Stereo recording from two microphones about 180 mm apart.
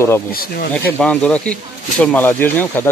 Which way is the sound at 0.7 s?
5° left (ahead or behind).